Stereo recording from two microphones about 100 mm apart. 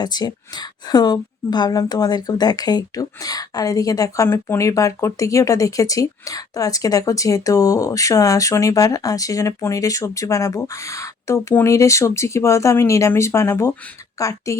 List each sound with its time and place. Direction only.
0.0 s a woman's voice: 45° left (ahead or behind)